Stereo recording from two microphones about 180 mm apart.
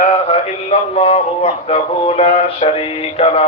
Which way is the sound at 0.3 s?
35° left (ahead or behind).